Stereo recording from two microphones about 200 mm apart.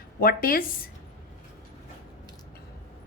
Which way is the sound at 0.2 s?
45° left (ahead or behind).